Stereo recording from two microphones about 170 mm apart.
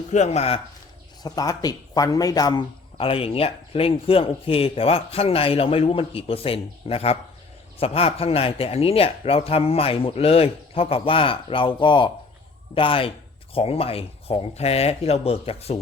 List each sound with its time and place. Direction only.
0.1 s speech: 40° left (ahead or behind)
1.2 s speech: 20° left (ahead or behind)